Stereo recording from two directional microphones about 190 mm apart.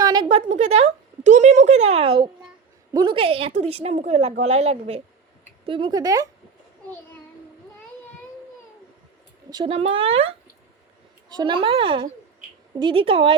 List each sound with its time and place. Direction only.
0.0 s a sound: 20° right (ahead or behind)
2.9 s a woman's voice: 25° right (ahead or behind)
9.5 s speech: 25° right (ahead or behind)
11.3 s speech: 25° right (ahead or behind)